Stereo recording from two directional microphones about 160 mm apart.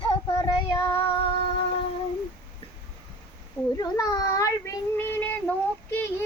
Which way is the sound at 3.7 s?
25° left (ahead or behind).